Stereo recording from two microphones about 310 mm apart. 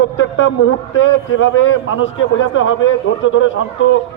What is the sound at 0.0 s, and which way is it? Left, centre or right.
A man's voice, left.